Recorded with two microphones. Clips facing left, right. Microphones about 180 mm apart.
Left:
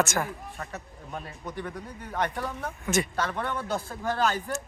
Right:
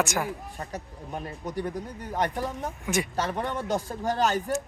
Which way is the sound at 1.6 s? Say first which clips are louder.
Right 4 dB; 20° right (ahead or behind).